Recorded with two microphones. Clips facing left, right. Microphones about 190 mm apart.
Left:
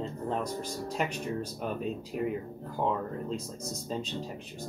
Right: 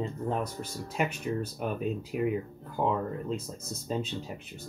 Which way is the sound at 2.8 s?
5° right (ahead or behind).